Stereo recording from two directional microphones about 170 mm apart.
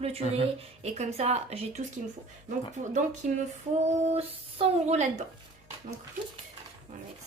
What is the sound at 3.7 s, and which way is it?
A woman's voice, 40° right (ahead or behind).